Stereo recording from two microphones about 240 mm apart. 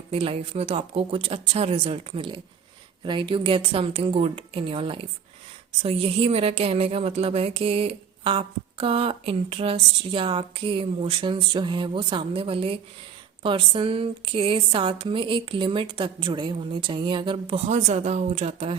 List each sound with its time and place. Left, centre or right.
0.1 s speech: right